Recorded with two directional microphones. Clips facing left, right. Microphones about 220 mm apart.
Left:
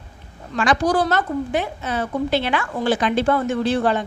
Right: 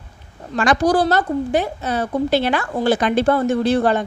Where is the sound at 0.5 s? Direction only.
40° right (ahead or behind).